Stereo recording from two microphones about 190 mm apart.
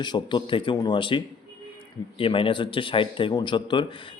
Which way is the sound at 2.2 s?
25° left (ahead or behind).